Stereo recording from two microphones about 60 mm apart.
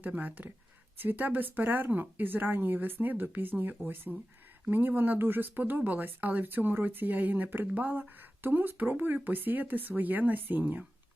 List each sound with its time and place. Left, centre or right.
0.0 s speech: right